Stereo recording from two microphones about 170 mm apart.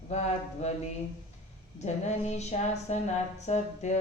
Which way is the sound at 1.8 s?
40° left (ahead or behind).